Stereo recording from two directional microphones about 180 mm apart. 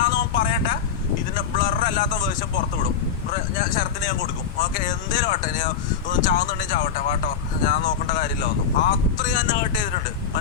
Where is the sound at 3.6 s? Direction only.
50° left (ahead or behind).